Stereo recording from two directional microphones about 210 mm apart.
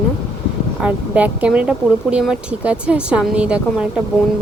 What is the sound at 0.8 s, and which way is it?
A woman's voice, 5° right (ahead or behind).